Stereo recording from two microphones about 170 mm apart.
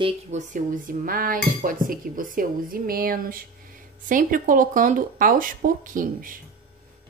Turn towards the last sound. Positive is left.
turn(degrees=-55)  # may be behind; listen again after turning